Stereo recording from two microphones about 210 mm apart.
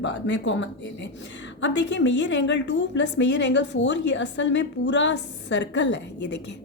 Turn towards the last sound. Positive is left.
turn(degrees=55)  # may be behind; listen again after turning